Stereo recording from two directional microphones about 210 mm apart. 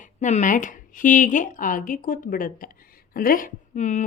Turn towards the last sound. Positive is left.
turn(degrees=35)  # may be behind; listen again after turning